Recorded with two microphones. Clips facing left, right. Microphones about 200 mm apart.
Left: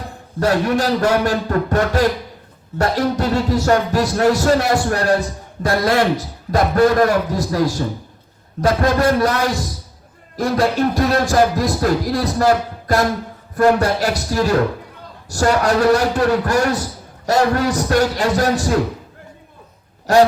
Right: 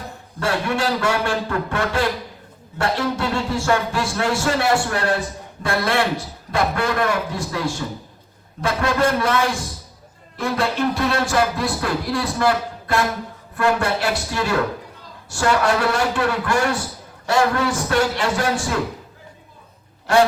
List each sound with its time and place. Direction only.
0.3 s music: 40° left (ahead or behind)
20.1 s music: 40° left (ahead or behind)